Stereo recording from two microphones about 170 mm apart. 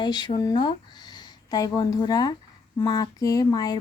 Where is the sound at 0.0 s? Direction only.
25° left (ahead or behind).